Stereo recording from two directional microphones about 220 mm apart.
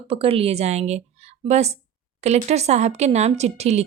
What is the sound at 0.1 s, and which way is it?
A woman's voice, 25° right (ahead or behind).